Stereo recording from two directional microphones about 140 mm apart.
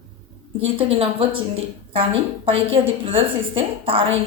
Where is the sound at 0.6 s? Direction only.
45° right (ahead or behind).